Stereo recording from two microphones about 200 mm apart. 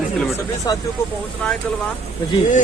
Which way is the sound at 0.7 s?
20° left (ahead or behind).